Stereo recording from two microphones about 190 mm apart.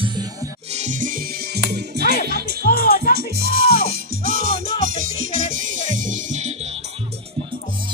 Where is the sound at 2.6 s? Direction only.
50° left (ahead or behind).